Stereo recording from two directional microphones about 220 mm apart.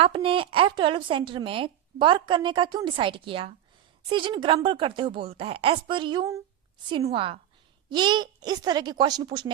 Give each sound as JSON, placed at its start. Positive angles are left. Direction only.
{"t": 0.0, "sound": "a woman's voice", "side_deg": -25}